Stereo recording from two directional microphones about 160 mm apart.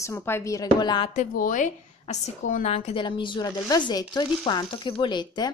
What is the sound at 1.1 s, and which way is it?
A woman's voice, 55° left (ahead or behind).